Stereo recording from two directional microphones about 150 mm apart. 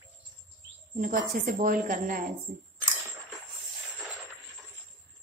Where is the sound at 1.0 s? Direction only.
65° right (ahead or behind).